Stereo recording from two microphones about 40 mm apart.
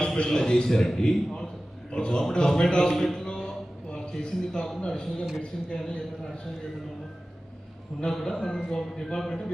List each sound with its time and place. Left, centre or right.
0.3 s a man's voice: centre
2.9 s a man's voice: centre
3.2 s a sound: centre
4.2 s a man's voice: left
8.1 s a man's voice: centre